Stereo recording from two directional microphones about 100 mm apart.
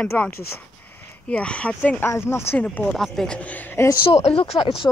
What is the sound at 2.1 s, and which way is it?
Speech, 25° left (ahead or behind).